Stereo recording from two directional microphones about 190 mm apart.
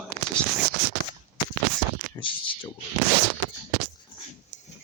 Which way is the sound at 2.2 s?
25° left (ahead or behind).